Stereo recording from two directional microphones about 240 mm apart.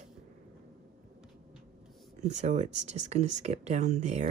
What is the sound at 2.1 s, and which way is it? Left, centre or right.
Speech, right.